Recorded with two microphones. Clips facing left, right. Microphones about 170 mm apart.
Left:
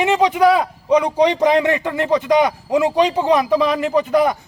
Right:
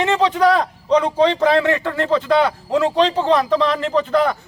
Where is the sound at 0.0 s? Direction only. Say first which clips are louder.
Left 2 dB; 15° left (ahead or behind).